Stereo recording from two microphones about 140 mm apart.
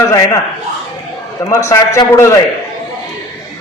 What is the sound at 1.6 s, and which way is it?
Speech, 20° left (ahead or behind).